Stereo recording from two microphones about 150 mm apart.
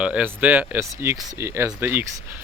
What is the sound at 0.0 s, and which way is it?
Speech, 10° right (ahead or behind).